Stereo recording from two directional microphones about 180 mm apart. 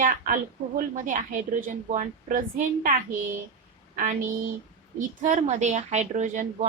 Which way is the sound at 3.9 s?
45° right (ahead or behind).